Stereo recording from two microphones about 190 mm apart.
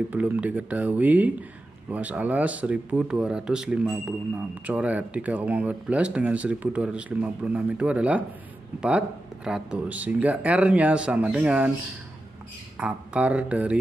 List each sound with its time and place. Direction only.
0.1 s speech: 10° right (ahead or behind)
12.7 s speech: 5° right (ahead or behind)